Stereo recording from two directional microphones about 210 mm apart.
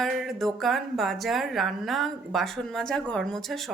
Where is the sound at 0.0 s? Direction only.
Centre (ahead or behind).